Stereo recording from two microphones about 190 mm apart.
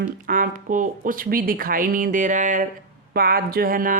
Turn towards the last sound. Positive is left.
turn(degrees=-45)  # may be behind; listen again after turning